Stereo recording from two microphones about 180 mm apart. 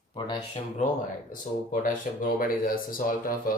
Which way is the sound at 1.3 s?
50° left (ahead or behind).